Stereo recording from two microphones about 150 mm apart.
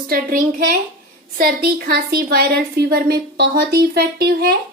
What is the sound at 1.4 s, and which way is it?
A woman's voice, 90° right.